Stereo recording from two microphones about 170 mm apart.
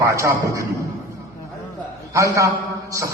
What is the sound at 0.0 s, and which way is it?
Speech, 20° right (ahead or behind).